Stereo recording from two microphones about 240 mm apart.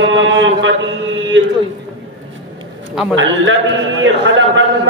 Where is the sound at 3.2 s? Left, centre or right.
Right.